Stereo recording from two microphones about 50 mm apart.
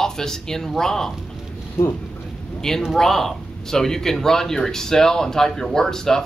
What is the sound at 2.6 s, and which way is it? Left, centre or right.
Speech, centre.